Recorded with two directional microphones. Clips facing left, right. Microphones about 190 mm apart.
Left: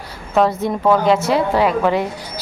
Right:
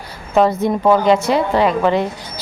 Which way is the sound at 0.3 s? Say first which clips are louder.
Right 2 dB; centre (ahead or behind).